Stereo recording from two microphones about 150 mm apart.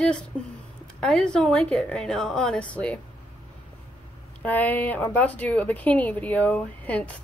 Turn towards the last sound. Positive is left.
turn(degrees=10)  # may be behind; listen again after turning